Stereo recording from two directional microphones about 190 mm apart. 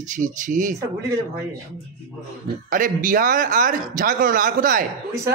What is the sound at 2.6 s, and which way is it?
Speech, 45° right (ahead or behind).